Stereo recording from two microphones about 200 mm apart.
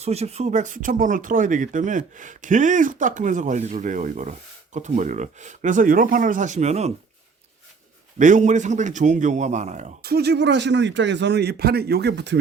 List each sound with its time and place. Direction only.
0.0 s speech: 30° right (ahead or behind)
8.2 s speech: 40° right (ahead or behind)
10.0 s a man's voice: 50° right (ahead or behind)